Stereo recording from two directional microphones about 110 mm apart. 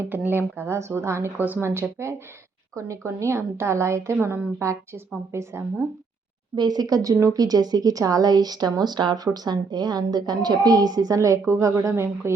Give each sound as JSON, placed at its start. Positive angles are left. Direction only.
{"t": 0.0, "sound": "a woman's voice", "side_deg": -15}
{"t": 6.6, "sound": "speech", "side_deg": -40}